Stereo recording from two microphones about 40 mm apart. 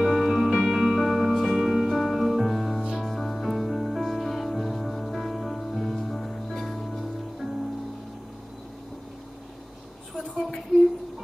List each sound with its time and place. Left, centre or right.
0.0 s music: centre
1.6 s music: centre
10.1 s a sound: centre